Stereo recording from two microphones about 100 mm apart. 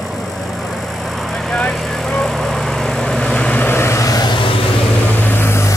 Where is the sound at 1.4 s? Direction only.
5° left (ahead or behind); by 4.3 s 35° left (ahead or behind).